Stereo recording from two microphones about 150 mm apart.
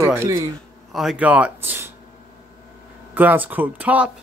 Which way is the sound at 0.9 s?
5° right (ahead or behind).